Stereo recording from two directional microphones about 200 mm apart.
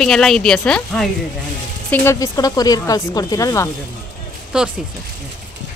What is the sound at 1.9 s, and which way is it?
Speech, 15° left (ahead or behind).